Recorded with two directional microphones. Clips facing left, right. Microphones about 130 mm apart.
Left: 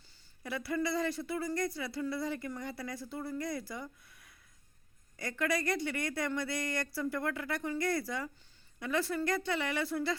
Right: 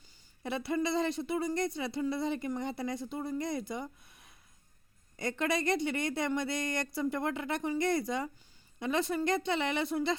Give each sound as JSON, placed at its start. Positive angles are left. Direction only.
{"t": 0.4, "sound": "speech", "side_deg": -25}